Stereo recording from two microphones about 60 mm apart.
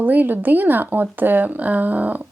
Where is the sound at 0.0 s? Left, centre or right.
Right.